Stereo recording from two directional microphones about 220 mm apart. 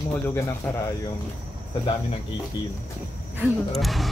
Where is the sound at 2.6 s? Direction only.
20° left (ahead or behind).